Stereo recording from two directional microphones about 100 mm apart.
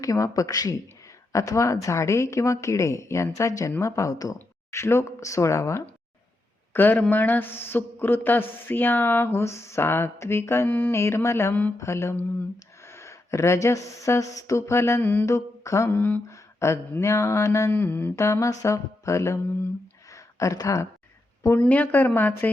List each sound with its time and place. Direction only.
0.0 s a woman's voice: 35° left (ahead or behind)
20.1 s a sound: 30° left (ahead or behind)
21.6 s a woman's voice: 15° left (ahead or behind)